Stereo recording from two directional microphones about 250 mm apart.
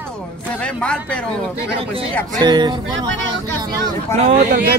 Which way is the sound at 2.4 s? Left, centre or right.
Centre.